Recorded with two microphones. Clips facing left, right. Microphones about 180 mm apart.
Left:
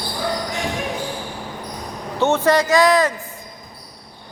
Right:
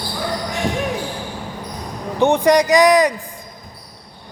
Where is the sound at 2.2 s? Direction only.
15° right (ahead or behind).